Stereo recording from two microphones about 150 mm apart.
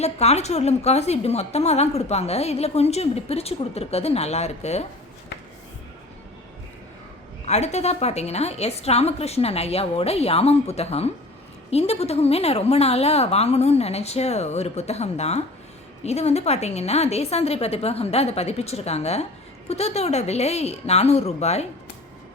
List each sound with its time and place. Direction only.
0.0 s a woman's voice: 45° left (ahead or behind)
7.4 s a woman's voice: 50° left (ahead or behind)